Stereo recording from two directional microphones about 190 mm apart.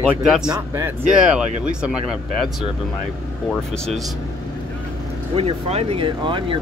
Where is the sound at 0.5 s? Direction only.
15° right (ahead or behind).